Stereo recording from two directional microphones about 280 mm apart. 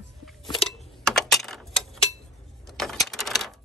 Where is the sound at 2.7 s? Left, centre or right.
Centre.